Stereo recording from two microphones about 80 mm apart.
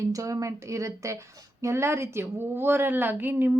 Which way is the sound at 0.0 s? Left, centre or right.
Right.